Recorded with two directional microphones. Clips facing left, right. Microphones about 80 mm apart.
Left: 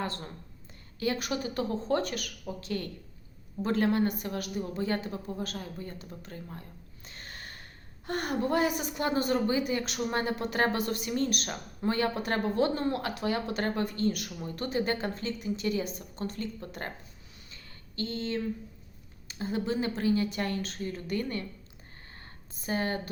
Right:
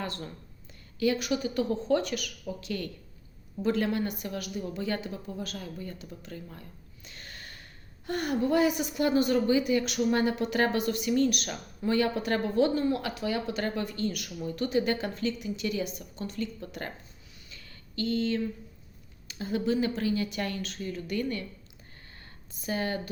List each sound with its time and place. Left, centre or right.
0.0 s a woman's voice: left
17.5 s a sound: left
19.3 s a woman's voice: left
22.6 s a woman's voice: left